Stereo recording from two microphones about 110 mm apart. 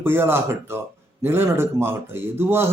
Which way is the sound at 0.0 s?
20° right (ahead or behind).